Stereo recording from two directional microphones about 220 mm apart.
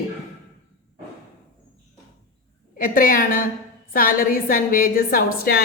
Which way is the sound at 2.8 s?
40° left (ahead or behind).